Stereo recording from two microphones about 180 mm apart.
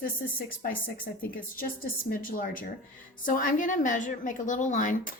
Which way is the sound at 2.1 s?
50° left (ahead or behind).